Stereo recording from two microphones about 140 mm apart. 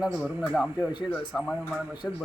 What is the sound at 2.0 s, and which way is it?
Speech, 15° left (ahead or behind).